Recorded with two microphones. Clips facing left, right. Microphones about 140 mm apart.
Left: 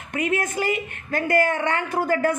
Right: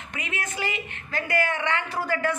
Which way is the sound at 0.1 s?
50° left (ahead or behind).